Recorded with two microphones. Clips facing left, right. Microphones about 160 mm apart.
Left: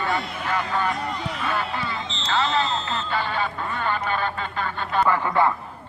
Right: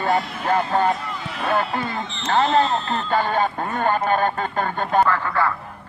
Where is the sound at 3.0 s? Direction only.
45° right (ahead or behind).